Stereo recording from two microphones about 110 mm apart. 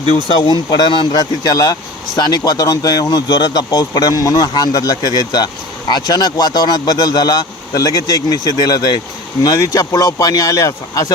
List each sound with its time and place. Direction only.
0.0 s speech: 65° left (ahead or behind)
0.4 s speech: 40° left (ahead or behind)